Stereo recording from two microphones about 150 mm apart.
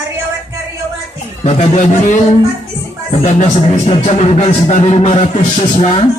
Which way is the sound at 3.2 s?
45° left (ahead or behind).